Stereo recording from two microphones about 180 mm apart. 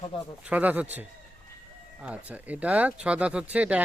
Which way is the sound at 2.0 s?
5° right (ahead or behind).